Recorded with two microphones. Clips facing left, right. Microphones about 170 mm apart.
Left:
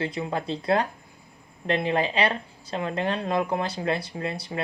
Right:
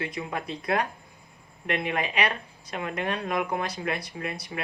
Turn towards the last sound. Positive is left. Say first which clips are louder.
# left 3 dB
turn(degrees=30)  # may be behind; listen again after turning